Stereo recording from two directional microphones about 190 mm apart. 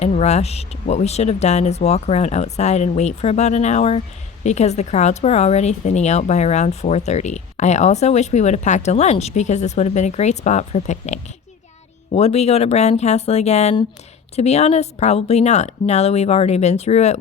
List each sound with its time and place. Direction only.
0.0 s speech: 35° left (ahead or behind)